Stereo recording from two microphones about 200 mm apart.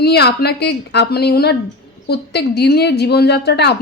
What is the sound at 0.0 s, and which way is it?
Speech, 55° left (ahead or behind).